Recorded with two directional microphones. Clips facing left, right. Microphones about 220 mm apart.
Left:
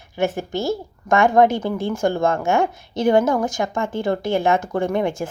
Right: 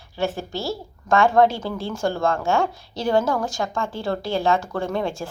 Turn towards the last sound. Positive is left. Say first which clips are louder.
# left 4 dB
turn(degrees=15)  # may be behind; listen again after turning